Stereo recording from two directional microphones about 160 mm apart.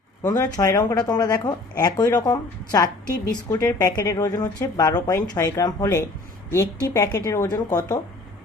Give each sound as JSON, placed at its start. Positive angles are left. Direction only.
{"t": 0.2, "sound": "a woman's voice", "side_deg": 20}